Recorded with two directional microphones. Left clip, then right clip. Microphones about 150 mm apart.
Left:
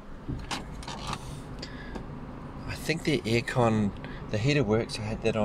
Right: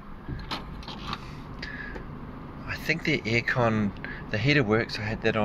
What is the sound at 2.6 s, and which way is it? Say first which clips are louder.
Speech: right 3 dB; 25° left (ahead or behind).